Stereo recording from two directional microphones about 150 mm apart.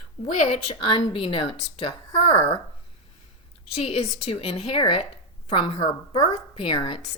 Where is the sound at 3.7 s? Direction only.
40° left (ahead or behind).